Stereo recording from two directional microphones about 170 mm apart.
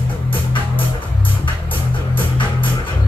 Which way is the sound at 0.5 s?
30° left (ahead or behind).